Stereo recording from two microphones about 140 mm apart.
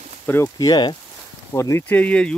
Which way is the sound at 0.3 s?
20° left (ahead or behind).